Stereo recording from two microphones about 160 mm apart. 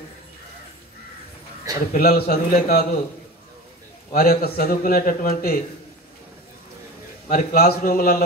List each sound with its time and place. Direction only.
2.0 s speech: 70° left (ahead or behind)
4.1 s speech: 70° left (ahead or behind)
7.2 s speech: 70° left (ahead or behind)